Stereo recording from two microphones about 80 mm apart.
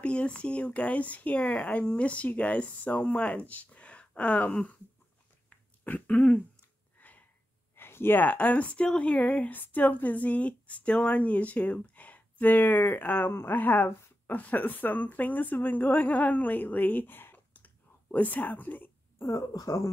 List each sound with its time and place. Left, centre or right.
0.0 s speech: centre
5.9 s speech: left
7.0 s a sound: left
7.7 s speech: left
19.2 s speech: left